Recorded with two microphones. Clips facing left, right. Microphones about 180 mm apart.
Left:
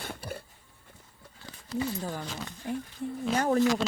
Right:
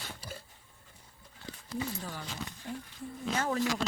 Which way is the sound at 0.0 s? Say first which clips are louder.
Left 6 dB; 55° left (ahead or behind).